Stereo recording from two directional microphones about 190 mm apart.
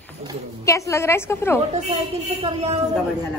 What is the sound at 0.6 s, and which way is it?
Speech, 15° left (ahead or behind).